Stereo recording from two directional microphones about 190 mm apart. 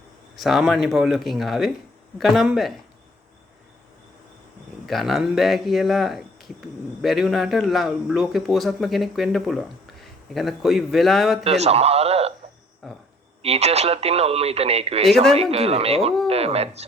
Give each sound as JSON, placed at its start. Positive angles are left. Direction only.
{"t": 0.3, "sound": "speech", "side_deg": 0}
{"t": 4.9, "sound": "speech", "side_deg": 0}
{"t": 11.4, "sound": "speech", "side_deg": -35}
{"t": 12.8, "sound": "speech", "side_deg": 0}
{"t": 13.4, "sound": "speech", "side_deg": -35}